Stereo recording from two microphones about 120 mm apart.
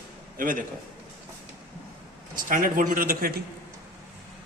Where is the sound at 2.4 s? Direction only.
90° right.